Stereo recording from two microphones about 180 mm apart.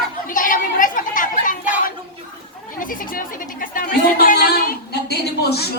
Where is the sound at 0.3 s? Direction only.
50° left (ahead or behind).